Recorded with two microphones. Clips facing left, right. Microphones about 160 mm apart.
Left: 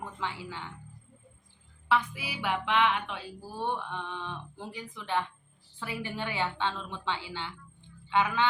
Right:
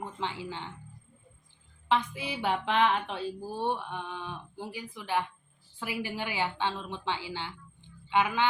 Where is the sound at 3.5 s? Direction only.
15° right (ahead or behind).